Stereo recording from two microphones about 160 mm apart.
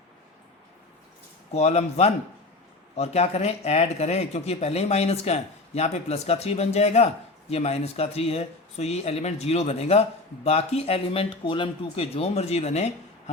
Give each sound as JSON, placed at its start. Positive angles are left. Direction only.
{"t": 1.5, "sound": "speech", "side_deg": 40}